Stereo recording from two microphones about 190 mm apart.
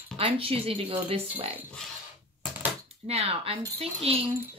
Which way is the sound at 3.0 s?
30° right (ahead or behind).